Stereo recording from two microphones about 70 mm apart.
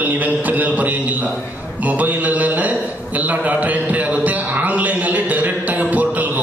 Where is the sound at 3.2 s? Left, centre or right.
Right.